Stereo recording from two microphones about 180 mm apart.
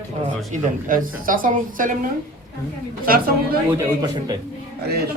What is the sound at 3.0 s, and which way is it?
Speech, 50° right (ahead or behind).